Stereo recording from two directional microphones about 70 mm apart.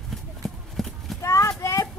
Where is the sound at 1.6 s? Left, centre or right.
Left.